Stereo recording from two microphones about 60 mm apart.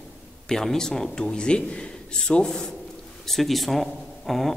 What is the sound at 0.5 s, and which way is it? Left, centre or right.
A man's voice, centre.